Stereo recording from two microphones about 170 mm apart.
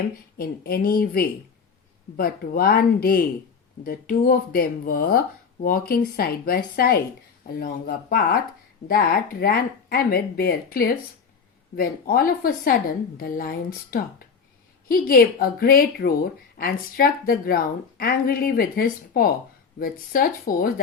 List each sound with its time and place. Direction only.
0.3 s a woman's voice: 60° left (ahead or behind)